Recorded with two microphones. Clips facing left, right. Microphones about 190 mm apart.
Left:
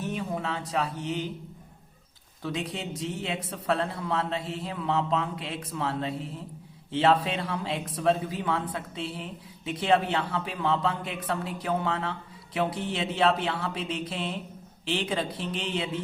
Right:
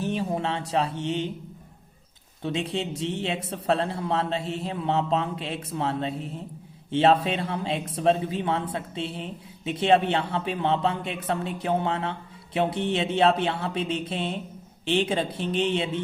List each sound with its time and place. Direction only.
0.0 s a sound: 30° right (ahead or behind)
0.7 s speech: 25° right (ahead or behind)
2.4 s speech: 25° right (ahead or behind)